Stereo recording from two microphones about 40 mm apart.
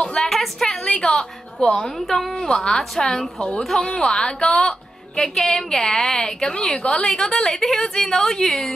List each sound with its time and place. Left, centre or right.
0.0 s a sound: left
0.3 s a sound: centre
0.8 s a woman's voice: centre
3.3 s a woman's voice: left
3.6 s a woman's voice: centre
5.1 s a woman's voice: centre